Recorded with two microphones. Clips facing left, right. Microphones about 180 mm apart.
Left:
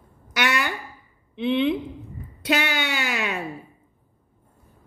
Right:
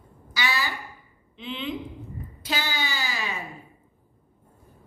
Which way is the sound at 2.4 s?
70° left (ahead or behind).